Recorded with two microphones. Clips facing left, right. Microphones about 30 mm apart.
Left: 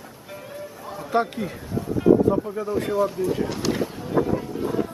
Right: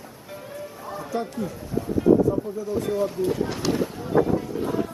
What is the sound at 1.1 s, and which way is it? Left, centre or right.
Speech, left.